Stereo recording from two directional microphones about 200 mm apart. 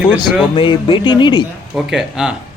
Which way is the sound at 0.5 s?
25° left (ahead or behind).